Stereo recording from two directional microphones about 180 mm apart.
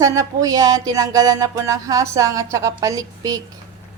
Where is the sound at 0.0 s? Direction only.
20° right (ahead or behind).